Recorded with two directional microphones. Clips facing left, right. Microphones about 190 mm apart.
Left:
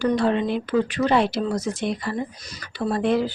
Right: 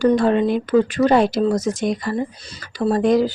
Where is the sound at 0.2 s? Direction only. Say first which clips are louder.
Right 4 dB; 45° right (ahead or behind).